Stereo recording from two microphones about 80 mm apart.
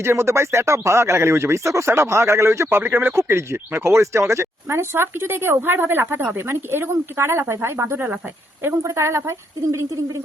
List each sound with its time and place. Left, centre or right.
0.0 s speech: right